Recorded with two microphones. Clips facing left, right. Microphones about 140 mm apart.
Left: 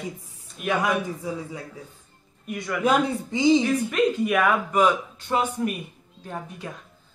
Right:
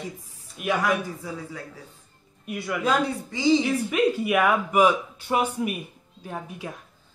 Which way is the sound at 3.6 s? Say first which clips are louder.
Left 1 dB; 10° right (ahead or behind).